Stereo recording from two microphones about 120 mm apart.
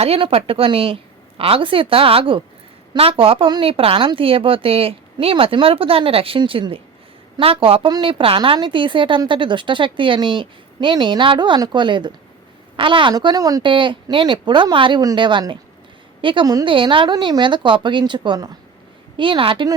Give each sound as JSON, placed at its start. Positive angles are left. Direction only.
{"t": 0.0, "sound": "a woman's voice", "side_deg": -55}
{"t": 13.6, "sound": "a woman's voice", "side_deg": -45}